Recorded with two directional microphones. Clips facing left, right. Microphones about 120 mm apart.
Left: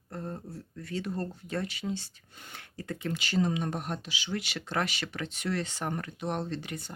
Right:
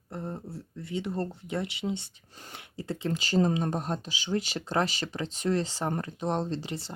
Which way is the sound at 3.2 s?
40° right (ahead or behind).